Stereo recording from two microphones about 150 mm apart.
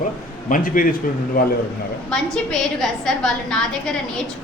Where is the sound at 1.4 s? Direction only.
80° left.